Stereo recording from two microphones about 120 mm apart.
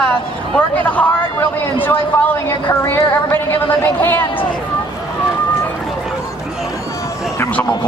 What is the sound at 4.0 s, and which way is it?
Speech, 15° left (ahead or behind).